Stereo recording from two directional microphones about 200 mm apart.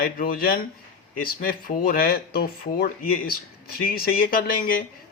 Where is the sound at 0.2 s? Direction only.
45° left (ahead or behind).